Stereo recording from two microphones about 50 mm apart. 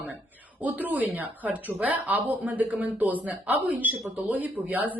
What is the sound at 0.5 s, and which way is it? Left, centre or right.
A woman's voice, right.